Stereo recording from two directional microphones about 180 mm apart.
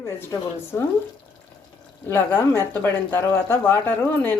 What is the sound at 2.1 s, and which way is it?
Speech, 10° left (ahead or behind).